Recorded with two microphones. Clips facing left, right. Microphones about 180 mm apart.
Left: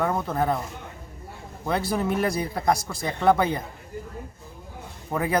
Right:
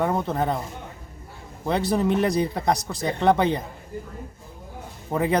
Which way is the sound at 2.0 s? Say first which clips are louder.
Right 4 dB; 25° right (ahead or behind).